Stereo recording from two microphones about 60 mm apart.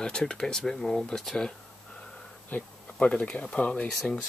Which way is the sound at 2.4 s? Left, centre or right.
Left.